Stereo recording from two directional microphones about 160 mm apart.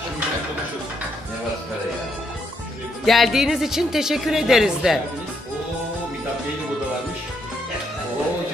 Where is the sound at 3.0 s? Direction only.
Centre (ahead or behind).